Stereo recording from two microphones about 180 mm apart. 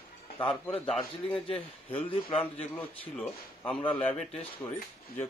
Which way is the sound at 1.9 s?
35° left (ahead or behind).